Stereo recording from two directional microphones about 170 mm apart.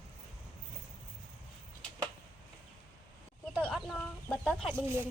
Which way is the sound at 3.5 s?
5° left (ahead or behind).